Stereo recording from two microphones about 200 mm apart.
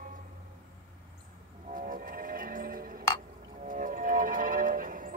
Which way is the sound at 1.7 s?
45° right (ahead or behind).